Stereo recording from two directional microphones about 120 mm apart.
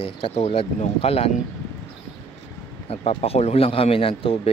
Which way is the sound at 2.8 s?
55° left (ahead or behind).